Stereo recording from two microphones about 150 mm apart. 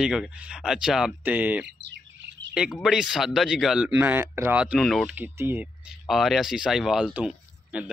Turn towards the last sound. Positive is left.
turn(degrees=-10)  # may be behind; listen again after turning